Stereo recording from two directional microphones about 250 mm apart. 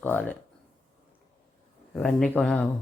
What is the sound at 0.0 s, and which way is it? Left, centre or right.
Speech, centre.